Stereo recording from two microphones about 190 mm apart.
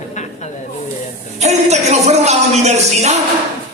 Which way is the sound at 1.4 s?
35° right (ahead or behind).